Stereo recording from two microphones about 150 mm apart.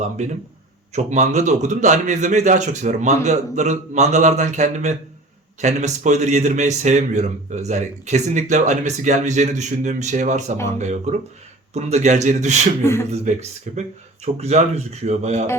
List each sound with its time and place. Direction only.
0.9 s a man's voice: 50° right (ahead or behind)
12.8 s speech: 15° left (ahead or behind)
13.3 s a man's voice: 50° right (ahead or behind)
14.3 s a man's voice: 45° right (ahead or behind)